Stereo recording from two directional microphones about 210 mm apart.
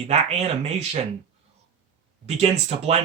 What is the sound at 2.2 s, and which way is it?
Speech, 30° right (ahead or behind).